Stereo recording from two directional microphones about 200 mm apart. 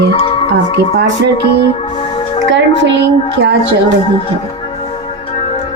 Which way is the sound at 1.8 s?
30° left (ahead or behind).